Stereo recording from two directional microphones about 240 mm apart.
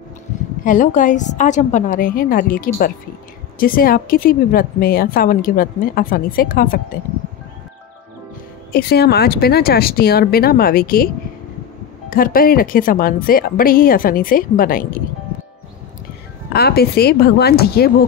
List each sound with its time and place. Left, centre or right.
0.7 s a woman's voice: left
8.7 s a woman's voice: left
12.1 s a woman's voice: left
16.5 s a woman's voice: left